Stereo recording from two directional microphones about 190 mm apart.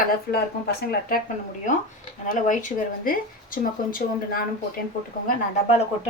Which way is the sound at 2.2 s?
45° left (ahead or behind).